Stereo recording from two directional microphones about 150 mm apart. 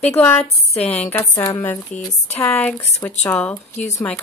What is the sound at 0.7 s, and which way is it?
Speech, 45° left (ahead or behind).